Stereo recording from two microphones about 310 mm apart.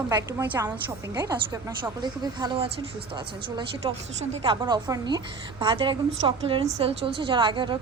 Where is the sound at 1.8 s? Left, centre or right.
Centre.